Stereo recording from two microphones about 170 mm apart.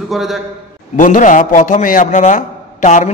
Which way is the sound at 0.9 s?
50° left (ahead or behind).